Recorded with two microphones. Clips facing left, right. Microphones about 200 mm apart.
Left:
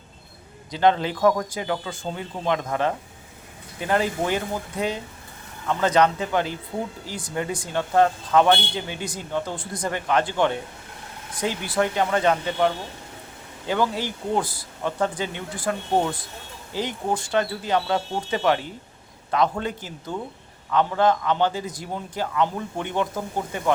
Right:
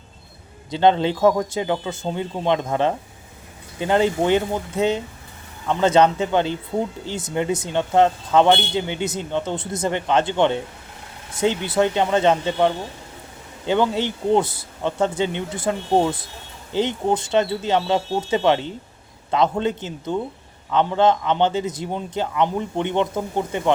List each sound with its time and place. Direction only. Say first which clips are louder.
0.7 s speech: right 3 dB; 25° right (ahead or behind)